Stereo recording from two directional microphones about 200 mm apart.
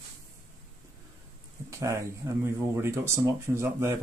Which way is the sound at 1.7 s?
15° right (ahead or behind).